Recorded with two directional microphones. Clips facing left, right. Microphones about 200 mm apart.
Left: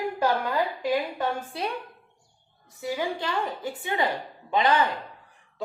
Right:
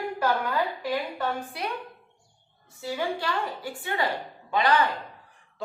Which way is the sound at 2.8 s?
20° left (ahead or behind).